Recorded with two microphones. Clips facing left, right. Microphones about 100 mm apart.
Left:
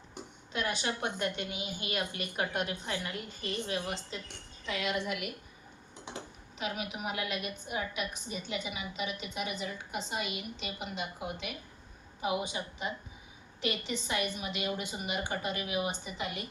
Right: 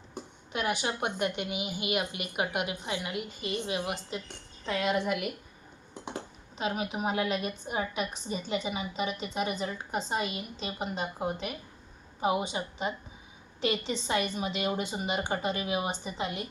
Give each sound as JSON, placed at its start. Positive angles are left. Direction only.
{"t": 0.5, "sound": "a woman's voice", "side_deg": -20}
{"t": 4.6, "sound": "a woman's voice", "side_deg": -40}
{"t": 6.6, "sound": "a woman's voice", "side_deg": -30}
{"t": 12.2, "sound": "a woman's voice", "side_deg": -30}